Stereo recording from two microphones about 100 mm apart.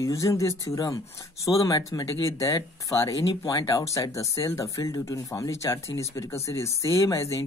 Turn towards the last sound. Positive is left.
turn(degrees=30)  # may be behind; listen again after turning